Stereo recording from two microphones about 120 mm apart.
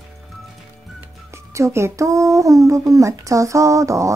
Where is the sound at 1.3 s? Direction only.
25° right (ahead or behind).